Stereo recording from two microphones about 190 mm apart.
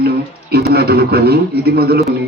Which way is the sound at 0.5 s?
55° right (ahead or behind).